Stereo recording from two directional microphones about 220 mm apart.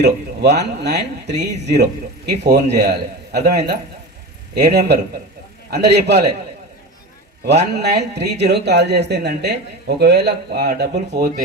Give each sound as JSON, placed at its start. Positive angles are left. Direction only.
{"t": 0.0, "sound": "speech", "side_deg": -50}
{"t": 7.8, "sound": "speech", "side_deg": -50}